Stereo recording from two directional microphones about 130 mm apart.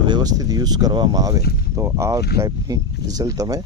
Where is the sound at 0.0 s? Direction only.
35° right (ahead or behind).